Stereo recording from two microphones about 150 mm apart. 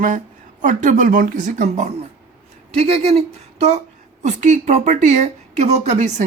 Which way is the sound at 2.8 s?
40° right (ahead or behind).